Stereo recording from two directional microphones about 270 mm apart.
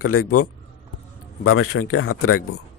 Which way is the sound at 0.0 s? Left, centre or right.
Left.